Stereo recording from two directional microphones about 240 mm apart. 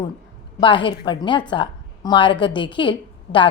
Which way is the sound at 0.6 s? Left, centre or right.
Centre.